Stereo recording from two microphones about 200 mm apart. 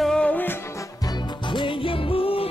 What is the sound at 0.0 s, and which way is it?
Music, 5° left (ahead or behind).